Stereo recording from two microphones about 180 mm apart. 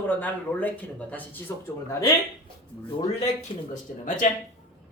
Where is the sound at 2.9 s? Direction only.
30° left (ahead or behind).